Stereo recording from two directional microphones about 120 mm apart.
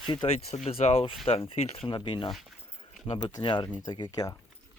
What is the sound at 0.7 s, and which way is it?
Speech, 55° left (ahead or behind).